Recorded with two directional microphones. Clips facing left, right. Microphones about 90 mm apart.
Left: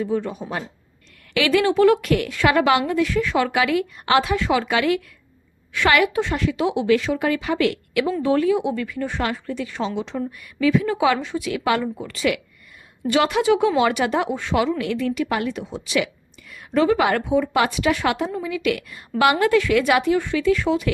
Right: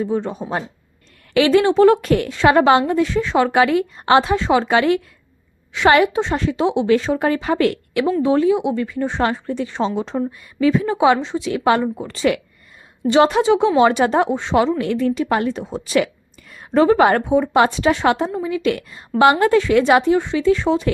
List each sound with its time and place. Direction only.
0.0 s a woman's voice: 30° right (ahead or behind)
8.2 s a woman's voice: 25° right (ahead or behind)